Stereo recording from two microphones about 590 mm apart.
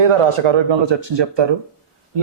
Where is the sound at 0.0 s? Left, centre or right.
Right.